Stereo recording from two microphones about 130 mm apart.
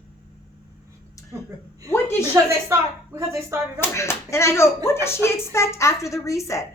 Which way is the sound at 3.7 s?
20° left (ahead or behind).